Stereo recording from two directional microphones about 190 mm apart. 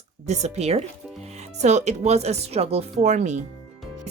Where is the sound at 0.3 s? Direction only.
35° right (ahead or behind).